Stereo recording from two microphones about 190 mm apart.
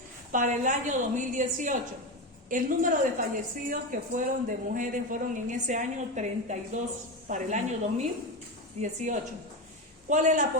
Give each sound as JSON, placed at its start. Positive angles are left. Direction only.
{"t": 0.3, "sound": "a woman's voice", "side_deg": -40}